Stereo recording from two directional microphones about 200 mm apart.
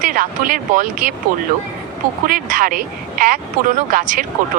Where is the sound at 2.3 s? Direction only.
45° right (ahead or behind).